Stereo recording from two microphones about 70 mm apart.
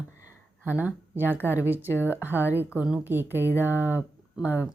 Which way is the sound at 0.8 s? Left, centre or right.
Right.